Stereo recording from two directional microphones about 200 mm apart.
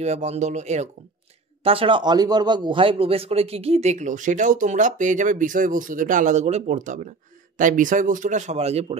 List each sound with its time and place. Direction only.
0.0 s a man's voice: 35° right (ahead or behind)